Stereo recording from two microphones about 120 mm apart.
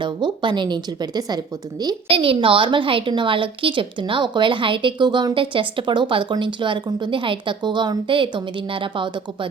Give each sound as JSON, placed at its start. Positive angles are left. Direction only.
{"t": 0.0, "sound": "a woman's voice", "side_deg": -40}
{"t": 2.0, "sound": "a woman's voice", "side_deg": -50}